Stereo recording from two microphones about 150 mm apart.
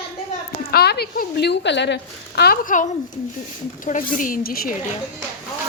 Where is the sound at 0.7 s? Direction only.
90° left.